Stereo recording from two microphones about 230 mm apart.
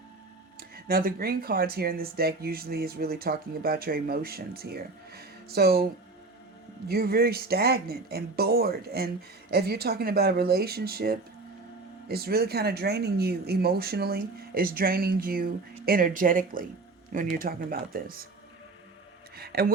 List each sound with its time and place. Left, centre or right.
0.9 s speech: right
19.4 s speech: right